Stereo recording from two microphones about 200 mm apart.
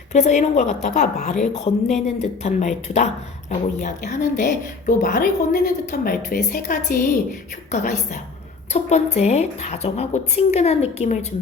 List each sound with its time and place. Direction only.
0.1 s a woman's voice: 35° left (ahead or behind)